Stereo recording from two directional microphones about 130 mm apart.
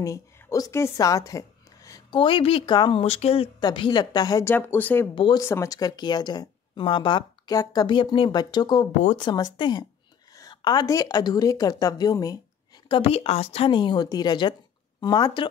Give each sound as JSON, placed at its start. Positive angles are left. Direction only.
{"t": 0.0, "sound": "a woman's voice", "side_deg": 25}
{"t": 3.6, "sound": "speech", "side_deg": 35}
{"t": 4.5, "sound": "speech", "side_deg": 15}
{"t": 5.1, "sound": "speech", "side_deg": 40}
{"t": 5.4, "sound": "a woman's voice", "side_deg": 20}
{"t": 12.8, "sound": "speech", "side_deg": 45}
{"t": 13.7, "sound": "speech", "side_deg": 40}